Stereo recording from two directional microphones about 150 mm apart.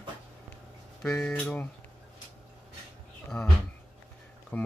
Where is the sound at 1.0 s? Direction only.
5° left (ahead or behind).